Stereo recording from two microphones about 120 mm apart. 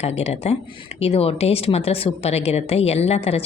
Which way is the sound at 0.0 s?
60° left (ahead or behind).